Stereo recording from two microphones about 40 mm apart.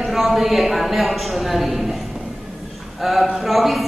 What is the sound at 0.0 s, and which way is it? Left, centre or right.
A man's voice, centre.